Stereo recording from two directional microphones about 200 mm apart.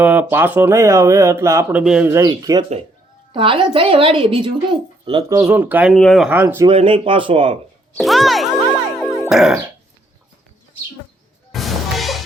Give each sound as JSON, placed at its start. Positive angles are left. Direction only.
{"t": 0.0, "sound": "a woman's voice", "side_deg": -10}
{"t": 5.4, "sound": "speech", "side_deg": -10}
{"t": 5.9, "sound": "speech", "side_deg": 5}
{"t": 6.7, "sound": "a woman's voice", "side_deg": -25}
{"t": 7.9, "sound": "speech", "side_deg": 0}
{"t": 11.5, "sound": "music", "side_deg": 0}